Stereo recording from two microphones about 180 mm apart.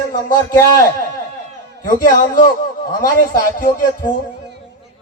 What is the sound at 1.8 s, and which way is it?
Speech, 45° left (ahead or behind).